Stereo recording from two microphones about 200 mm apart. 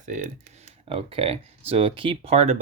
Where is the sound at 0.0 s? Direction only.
40° right (ahead or behind).